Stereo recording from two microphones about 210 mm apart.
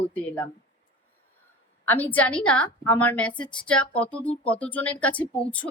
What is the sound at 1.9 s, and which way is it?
A woman's voice, 5° left (ahead or behind).